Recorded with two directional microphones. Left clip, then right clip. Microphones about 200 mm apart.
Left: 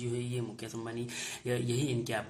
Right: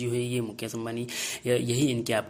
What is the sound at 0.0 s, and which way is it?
Speech, 40° right (ahead or behind).